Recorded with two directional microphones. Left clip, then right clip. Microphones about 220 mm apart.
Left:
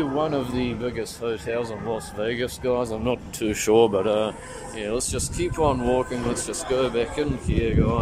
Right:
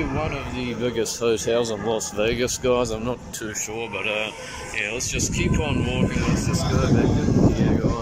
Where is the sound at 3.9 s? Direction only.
25° left (ahead or behind).